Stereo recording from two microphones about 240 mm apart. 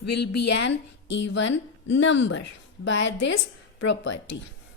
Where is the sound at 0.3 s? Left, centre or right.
Left.